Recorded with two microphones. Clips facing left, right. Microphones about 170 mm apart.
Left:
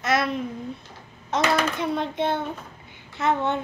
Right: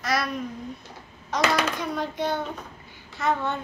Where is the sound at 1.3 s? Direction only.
25° left (ahead or behind).